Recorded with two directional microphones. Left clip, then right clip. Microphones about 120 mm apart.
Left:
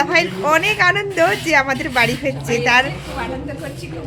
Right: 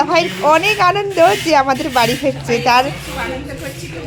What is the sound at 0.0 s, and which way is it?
A woman's voice, 20° right (ahead or behind).